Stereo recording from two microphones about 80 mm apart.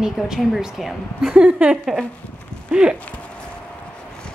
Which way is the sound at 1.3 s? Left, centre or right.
Right.